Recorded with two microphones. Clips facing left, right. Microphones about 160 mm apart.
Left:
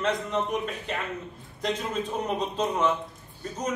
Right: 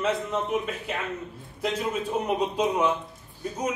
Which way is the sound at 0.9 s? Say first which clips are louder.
Right 1 dB; 5° right (ahead or behind).